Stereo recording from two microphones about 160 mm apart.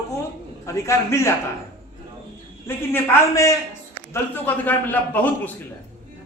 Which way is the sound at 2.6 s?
15° left (ahead or behind).